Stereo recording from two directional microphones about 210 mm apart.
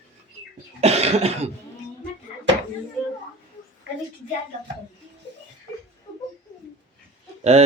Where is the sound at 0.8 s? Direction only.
30° right (ahead or behind).